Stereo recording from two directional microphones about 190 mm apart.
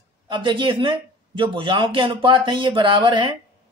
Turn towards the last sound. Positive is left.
turn(degrees=-25)  # may be behind; listen again after turning